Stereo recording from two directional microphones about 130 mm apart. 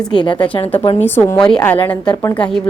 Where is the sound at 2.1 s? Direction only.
25° left (ahead or behind).